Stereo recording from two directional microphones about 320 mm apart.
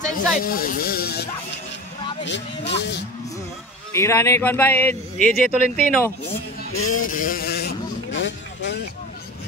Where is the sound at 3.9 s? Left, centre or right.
Centre.